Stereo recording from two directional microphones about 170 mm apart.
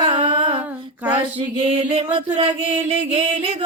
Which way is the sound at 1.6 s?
35° right (ahead or behind).